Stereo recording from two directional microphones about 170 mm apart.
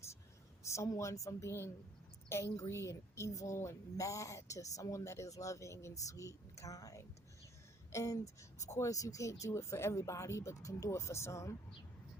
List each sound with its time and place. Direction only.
0.6 s speech: 15° left (ahead or behind)